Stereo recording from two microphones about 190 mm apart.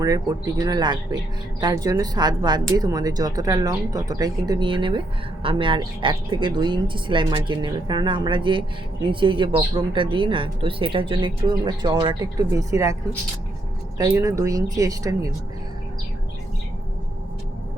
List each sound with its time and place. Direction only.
0.0 s speech: 20° right (ahead or behind)
14.0 s speech: 15° right (ahead or behind)